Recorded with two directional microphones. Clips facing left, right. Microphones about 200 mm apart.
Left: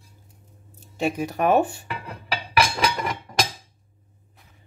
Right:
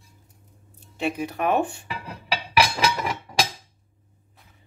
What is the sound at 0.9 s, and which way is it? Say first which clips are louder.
Speech: left 2 dB; 45° left (ahead or behind).